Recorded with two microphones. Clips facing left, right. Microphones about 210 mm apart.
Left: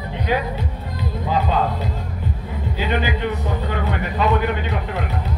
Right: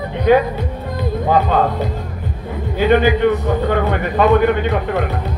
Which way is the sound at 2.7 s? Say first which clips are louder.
Right 10 dB; 55° right (ahead or behind).